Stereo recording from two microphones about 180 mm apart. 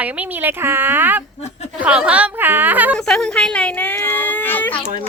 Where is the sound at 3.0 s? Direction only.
5° left (ahead or behind).